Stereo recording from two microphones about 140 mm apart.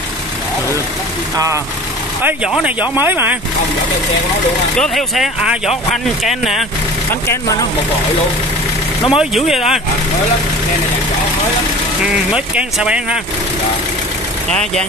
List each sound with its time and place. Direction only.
1.3 s speech: 25° right (ahead or behind)
2.2 s speech: 5° right (ahead or behind)
4.7 s speech: centre (ahead or behind)
9.0 s speech: 5° right (ahead or behind)
12.0 s speech: 5° right (ahead or behind)
14.5 s speech: 5° left (ahead or behind)